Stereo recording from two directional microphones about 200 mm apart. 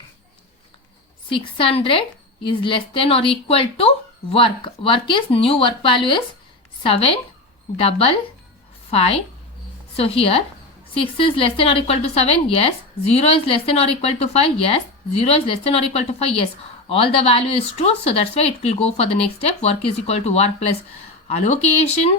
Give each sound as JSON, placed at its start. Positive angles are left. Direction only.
{"t": 1.3, "sound": "a woman's voice", "side_deg": 25}